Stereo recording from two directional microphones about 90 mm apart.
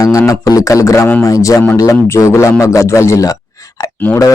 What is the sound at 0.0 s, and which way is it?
A man's voice, 35° left (ahead or behind).